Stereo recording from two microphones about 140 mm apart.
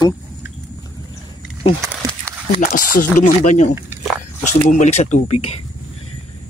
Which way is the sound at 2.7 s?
65° left (ahead or behind).